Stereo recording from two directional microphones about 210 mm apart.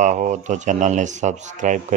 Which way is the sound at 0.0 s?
35° right (ahead or behind).